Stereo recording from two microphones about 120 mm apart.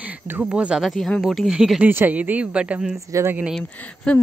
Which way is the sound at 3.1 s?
20° right (ahead or behind).